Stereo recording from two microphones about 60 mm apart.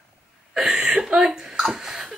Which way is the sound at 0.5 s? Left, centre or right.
Centre.